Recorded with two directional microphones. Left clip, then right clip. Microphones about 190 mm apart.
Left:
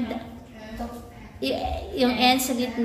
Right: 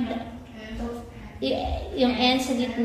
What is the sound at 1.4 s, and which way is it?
A woman's voice, 15° left (ahead or behind).